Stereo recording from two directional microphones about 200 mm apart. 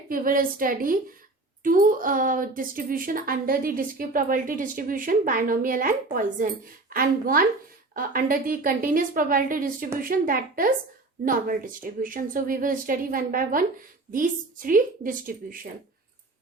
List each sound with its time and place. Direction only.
0.1 s a woman's voice: 45° right (ahead or behind)